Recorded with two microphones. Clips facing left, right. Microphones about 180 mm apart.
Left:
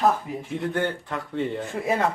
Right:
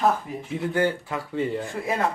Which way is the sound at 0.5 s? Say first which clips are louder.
Right 3 dB; centre (ahead or behind).